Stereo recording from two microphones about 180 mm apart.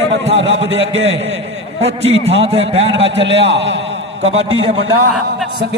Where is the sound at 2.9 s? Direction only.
85° right.